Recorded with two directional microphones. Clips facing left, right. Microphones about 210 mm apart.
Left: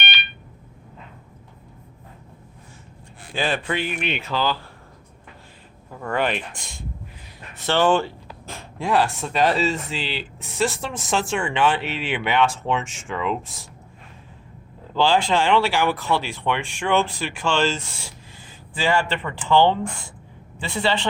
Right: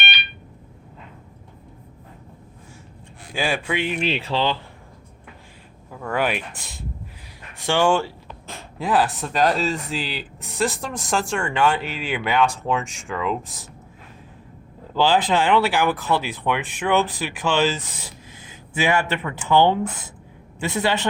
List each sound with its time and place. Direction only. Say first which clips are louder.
3.3 s speech: even; 10° right (ahead or behind)
3.8 s speech: right 3 dB; 30° right (ahead or behind)
6.0 s speech: even; 5° right (ahead or behind)
14.9 s speech: even; 5° right (ahead or behind)
18.9 s speech: left 1 dB; 10° right (ahead or behind)